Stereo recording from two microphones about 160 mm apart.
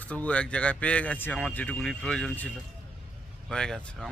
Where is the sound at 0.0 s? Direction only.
10° left (ahead or behind).